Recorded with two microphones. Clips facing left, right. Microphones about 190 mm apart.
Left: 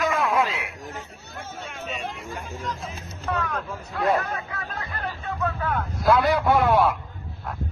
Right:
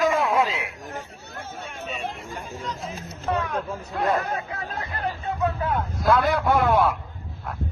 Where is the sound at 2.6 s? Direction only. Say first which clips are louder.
Even; centre (ahead or behind).